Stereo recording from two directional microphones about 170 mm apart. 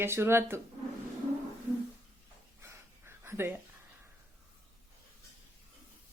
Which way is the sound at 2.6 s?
15° right (ahead or behind).